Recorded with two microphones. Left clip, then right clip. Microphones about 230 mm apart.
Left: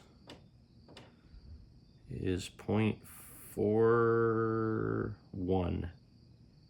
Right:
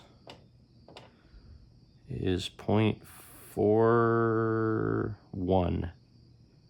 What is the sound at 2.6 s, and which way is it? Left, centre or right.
Speech, right.